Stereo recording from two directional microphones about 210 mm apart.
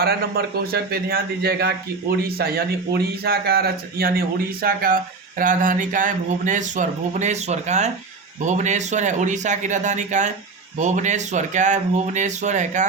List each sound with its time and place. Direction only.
0.0 s speech: 45° right (ahead or behind)